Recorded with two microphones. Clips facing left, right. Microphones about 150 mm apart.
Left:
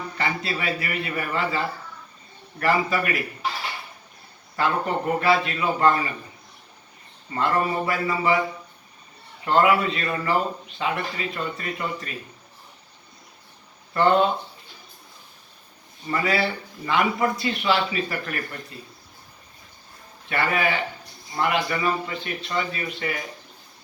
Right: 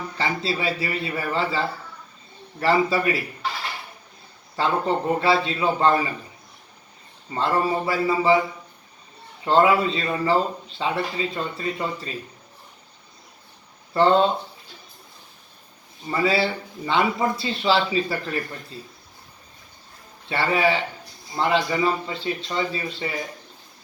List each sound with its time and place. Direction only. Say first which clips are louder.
0.2 s a man's voice: right 2 dB; 30° right (ahead or behind)
4.5 s a man's voice: right 2 dB; 30° right (ahead or behind)
7.3 s a man's voice: right 1 dB; 30° right (ahead or behind)
9.4 s a man's voice: right 1 dB; 25° right (ahead or behind)
13.9 s a man's voice: right 1 dB; 30° right (ahead or behind)
16.0 s a man's voice: right 2 dB; 25° right (ahead or behind)
20.3 s a man's voice: right 2 dB; 30° right (ahead or behind)